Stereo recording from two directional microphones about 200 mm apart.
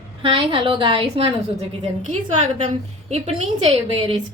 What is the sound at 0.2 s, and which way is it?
A woman's voice, 25° right (ahead or behind).